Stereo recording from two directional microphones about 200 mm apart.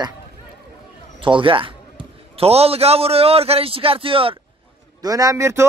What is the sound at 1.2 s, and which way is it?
A man's voice, 25° right (ahead or behind).